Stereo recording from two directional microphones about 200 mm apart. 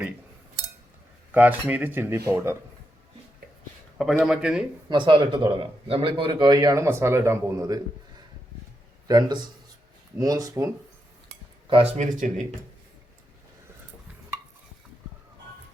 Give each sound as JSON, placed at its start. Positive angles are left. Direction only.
{"t": 1.3, "sound": "speech", "side_deg": -10}
{"t": 3.9, "sound": "speech", "side_deg": 0}
{"t": 4.9, "sound": "speech", "side_deg": -25}
{"t": 9.0, "sound": "speech", "side_deg": -20}
{"t": 11.7, "sound": "speech", "side_deg": -30}